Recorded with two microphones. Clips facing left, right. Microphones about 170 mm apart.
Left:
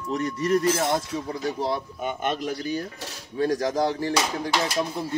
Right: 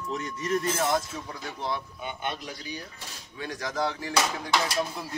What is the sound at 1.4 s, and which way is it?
Speech, 35° left (ahead or behind).